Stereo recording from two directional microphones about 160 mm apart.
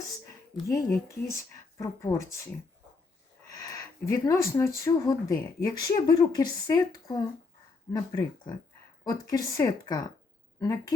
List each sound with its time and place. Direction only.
0.7 s speech: 20° left (ahead or behind)
3.5 s speech: 20° left (ahead or behind)